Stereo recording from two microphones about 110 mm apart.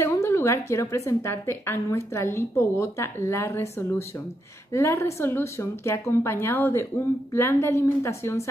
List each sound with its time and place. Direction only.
0.0 s a woman's voice: 25° left (ahead or behind)
4.7 s a woman's voice: 25° left (ahead or behind)